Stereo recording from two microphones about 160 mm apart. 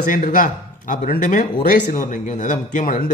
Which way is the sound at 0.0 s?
55° left (ahead or behind).